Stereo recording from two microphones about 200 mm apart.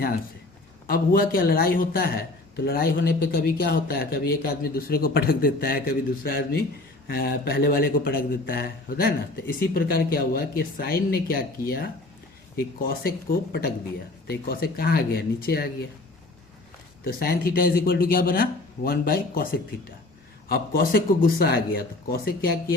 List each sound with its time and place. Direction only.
0.9 s speech: 45° left (ahead or behind)
17.0 s speech: 50° left (ahead or behind)